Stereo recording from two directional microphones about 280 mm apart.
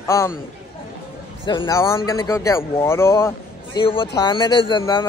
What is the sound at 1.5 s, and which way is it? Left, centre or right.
Speech, centre.